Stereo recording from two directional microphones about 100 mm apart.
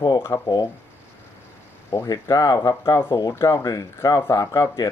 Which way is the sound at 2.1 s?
35° left (ahead or behind).